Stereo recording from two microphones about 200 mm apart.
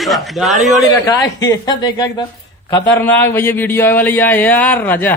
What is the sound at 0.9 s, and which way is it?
Speech, 20° left (ahead or behind).